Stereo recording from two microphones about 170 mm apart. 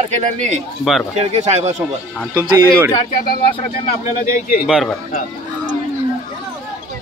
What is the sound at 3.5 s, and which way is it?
Speech, 35° left (ahead or behind).